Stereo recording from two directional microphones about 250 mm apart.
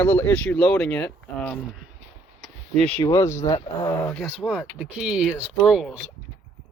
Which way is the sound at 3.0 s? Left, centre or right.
Centre.